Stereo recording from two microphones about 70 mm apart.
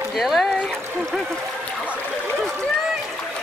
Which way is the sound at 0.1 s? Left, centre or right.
Centre.